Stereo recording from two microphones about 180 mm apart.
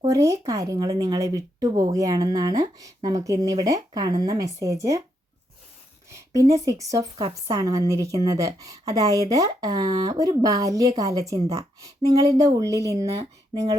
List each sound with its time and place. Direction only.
0.0 s speech: 20° right (ahead or behind)
6.1 s speech: 15° right (ahead or behind)